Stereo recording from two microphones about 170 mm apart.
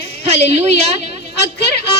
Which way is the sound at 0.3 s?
40° right (ahead or behind).